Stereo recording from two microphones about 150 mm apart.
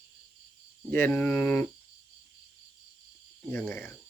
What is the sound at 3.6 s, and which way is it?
Speech, 15° left (ahead or behind).